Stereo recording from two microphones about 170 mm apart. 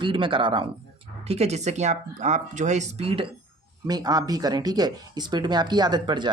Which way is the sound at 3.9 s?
20° right (ahead or behind).